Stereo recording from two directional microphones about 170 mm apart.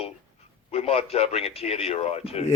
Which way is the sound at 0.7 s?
35° left (ahead or behind).